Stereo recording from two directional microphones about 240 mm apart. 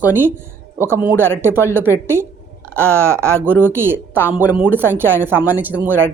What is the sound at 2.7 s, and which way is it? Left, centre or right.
A woman's voice, centre.